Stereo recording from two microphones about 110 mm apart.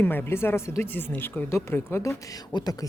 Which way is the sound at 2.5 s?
40° left (ahead or behind).